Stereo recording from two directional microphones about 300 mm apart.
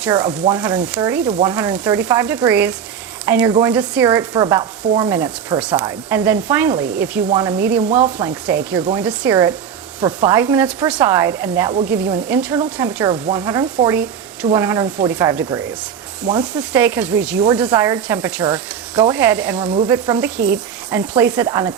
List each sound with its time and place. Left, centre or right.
0.0 s sizzle: centre
19.5 s speech: centre
19.9 s sizzle: centre